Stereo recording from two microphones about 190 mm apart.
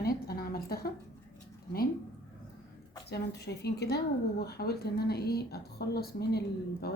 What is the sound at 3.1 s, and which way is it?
A woman's voice, 60° left (ahead or behind).